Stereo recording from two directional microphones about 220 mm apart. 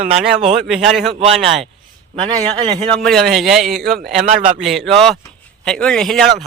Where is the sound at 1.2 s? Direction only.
30° right (ahead or behind).